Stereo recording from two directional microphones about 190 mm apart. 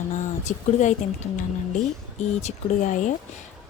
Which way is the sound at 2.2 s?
40° left (ahead or behind).